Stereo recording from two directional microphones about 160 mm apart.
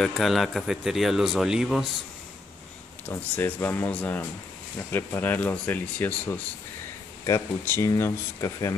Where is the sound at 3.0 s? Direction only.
10° left (ahead or behind).